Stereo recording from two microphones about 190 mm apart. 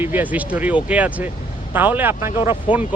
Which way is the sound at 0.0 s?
10° right (ahead or behind).